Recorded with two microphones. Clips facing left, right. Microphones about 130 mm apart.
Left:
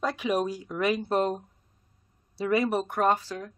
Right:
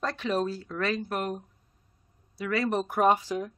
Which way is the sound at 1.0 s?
25° left (ahead or behind).